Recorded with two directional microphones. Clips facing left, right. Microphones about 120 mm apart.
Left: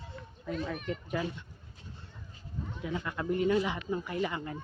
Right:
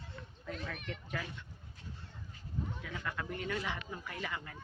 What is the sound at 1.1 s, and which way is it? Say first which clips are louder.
Speech: left 8 dB; 20° left (ahead or behind).